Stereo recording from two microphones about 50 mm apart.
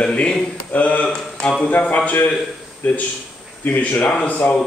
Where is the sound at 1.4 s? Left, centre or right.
Centre.